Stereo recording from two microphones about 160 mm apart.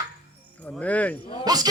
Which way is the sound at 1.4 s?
25° right (ahead or behind).